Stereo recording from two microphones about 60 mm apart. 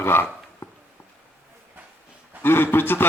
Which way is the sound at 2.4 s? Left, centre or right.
Left.